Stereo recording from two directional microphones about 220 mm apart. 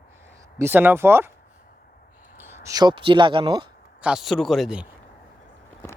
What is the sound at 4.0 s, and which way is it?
Speech, 5° right (ahead or behind).